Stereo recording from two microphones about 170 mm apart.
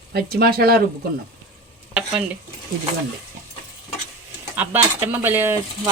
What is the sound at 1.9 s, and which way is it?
Stir, 5° right (ahead or behind).